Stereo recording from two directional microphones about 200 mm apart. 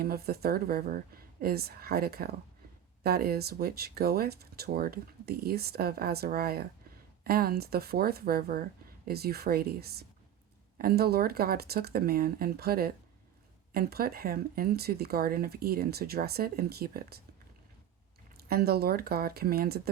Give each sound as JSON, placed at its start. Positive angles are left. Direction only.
{"t": 0.0, "sound": "speech", "side_deg": -50}
{"t": 18.4, "sound": "speech", "side_deg": -50}